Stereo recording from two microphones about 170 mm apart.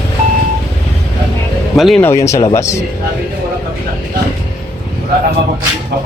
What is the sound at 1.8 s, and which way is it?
Speech, centre (ahead or behind).